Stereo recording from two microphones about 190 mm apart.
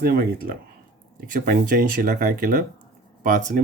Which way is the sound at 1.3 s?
45° right (ahead or behind).